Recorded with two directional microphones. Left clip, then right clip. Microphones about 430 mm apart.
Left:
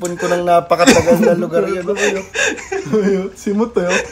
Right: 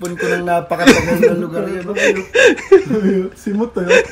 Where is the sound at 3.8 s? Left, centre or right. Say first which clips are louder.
Right 5 dB; centre.